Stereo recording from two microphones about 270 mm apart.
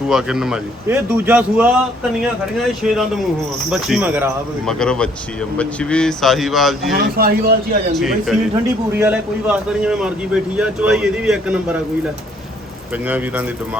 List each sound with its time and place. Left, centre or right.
0.1 s speech: centre
6.9 s speech: right
7.9 s speech: centre
13.1 s speech: centre